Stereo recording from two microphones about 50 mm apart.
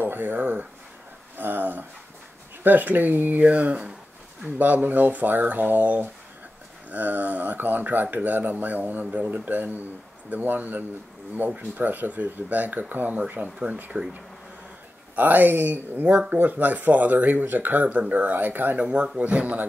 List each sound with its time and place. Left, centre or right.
0.0 s speech: right
15.1 s speech: right
18.8 s speech: right